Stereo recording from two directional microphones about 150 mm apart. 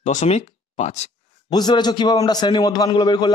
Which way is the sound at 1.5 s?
30° left (ahead or behind).